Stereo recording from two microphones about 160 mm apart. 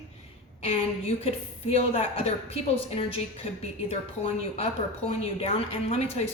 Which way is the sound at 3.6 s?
40° left (ahead or behind).